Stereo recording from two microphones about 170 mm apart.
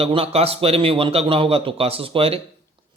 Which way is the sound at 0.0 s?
35° right (ahead or behind).